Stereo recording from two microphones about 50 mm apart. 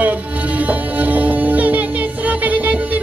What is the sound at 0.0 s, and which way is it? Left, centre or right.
Music, right.